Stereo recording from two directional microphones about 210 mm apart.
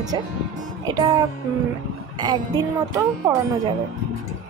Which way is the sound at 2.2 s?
20° right (ahead or behind).